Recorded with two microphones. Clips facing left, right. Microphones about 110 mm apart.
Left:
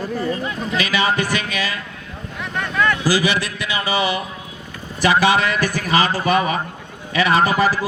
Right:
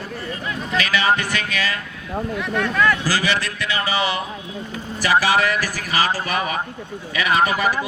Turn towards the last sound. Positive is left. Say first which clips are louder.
# left 2 dB
turn(degrees=30)  # may be behind; listen again after turning